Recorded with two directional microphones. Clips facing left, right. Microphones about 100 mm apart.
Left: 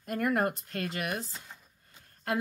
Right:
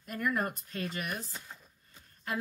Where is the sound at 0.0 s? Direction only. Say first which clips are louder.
Left 4 dB; 55° left (ahead or behind).